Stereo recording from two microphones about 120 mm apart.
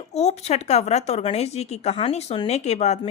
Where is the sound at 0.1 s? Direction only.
65° left (ahead or behind).